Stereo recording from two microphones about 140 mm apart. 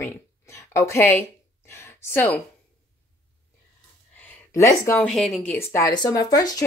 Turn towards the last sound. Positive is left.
turn(degrees=25)  # may be behind; listen again after turning